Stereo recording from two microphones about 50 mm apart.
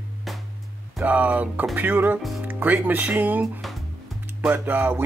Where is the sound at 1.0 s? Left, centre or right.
Right.